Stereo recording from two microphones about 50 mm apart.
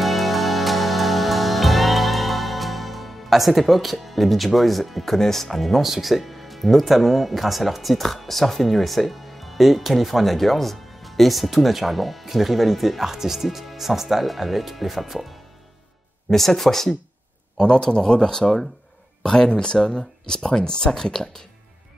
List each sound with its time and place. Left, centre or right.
0.0 s music: centre
16.3 s speech: centre
17.6 s speech: centre